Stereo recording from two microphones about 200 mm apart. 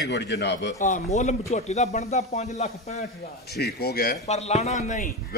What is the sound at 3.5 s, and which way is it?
Speech, 50° left (ahead or behind).